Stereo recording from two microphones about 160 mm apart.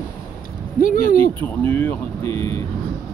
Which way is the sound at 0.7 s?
60° left (ahead or behind).